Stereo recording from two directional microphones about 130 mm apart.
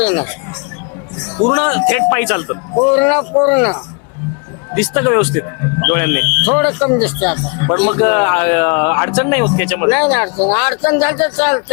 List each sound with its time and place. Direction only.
0.0 s speech: 15° left (ahead or behind)
1.4 s speech: 20° left (ahead or behind)